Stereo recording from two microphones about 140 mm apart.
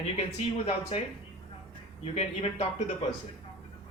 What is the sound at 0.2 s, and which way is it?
Speech, 45° left (ahead or behind).